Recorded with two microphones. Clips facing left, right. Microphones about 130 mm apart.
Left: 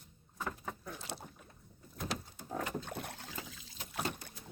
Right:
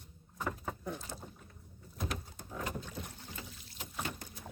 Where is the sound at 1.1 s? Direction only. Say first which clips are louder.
Left 2 dB; 75° left (ahead or behind).